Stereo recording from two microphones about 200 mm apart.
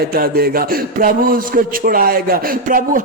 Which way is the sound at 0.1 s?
50° right (ahead or behind).